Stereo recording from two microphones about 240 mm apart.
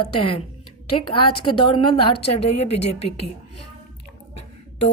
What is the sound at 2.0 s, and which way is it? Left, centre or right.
Speech, left.